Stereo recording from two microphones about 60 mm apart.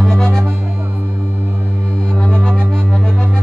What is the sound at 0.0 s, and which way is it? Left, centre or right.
Music, centre.